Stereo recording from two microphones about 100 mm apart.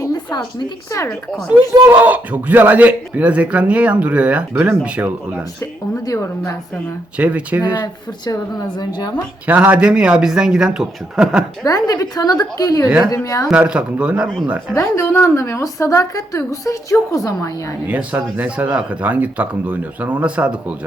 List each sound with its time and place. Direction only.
0.0 s a sound: 45° left (ahead or behind)
1.8 s speech: 20° right (ahead or behind)
6.1 s a woman's voice: 30° left (ahead or behind)
7.2 s speech: 10° right (ahead or behind)
8.2 s a woman's voice: 45° left (ahead or behind)
9.5 s speech: 15° right (ahead or behind)
11.6 s a woman's voice: 35° left (ahead or behind)
13.5 s speech: 10° right (ahead or behind)
14.8 s a woman's voice: 25° left (ahead or behind)
17.8 s speech: 15° right (ahead or behind)